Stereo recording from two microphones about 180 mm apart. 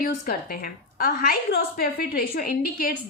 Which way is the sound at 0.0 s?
55° left (ahead or behind).